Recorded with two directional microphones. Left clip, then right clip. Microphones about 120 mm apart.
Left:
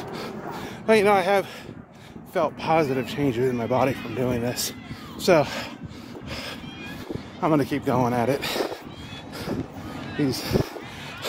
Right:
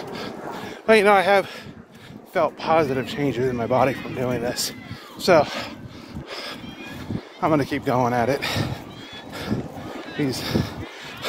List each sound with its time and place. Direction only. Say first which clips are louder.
0.8 s speech: right 3 dB; 10° left (ahead or behind)
2.3 s speech: right 2 dB; 30° left (ahead or behind)
3.5 s speech: right 3 dB; 15° left (ahead or behind)
4.2 s speech: right 1 dB; 45° left (ahead or behind)
7.5 s speech: right 1 dB; 20° left (ahead or behind)
9.3 s boat: right 2 dB; 30° left (ahead or behind)
10.2 s speech: even; 35° left (ahead or behind)